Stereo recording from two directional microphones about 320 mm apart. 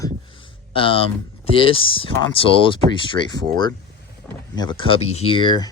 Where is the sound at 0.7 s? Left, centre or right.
Centre.